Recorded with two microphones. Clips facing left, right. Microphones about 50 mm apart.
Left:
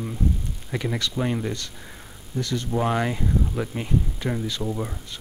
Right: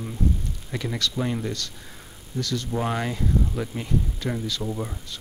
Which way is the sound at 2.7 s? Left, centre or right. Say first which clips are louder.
Left 5 dB; centre.